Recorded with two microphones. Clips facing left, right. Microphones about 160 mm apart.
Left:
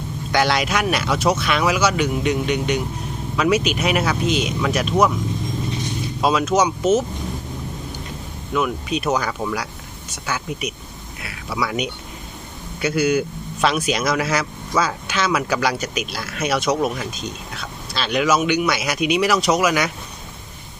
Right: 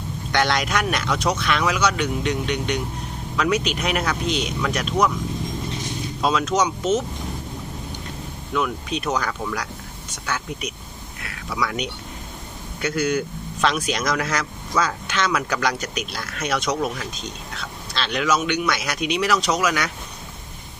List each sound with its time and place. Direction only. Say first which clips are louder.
0.3 s speech: left 2 dB; 5° left (ahead or behind)
6.2 s speech: left 3 dB; 10° left (ahead or behind)
8.5 s speech: left 3 dB; 5° left (ahead or behind)
11.2 s a sound: left 2 dB; 10° left (ahead or behind)
12.8 s speech: left 4 dB; 10° left (ahead or behind)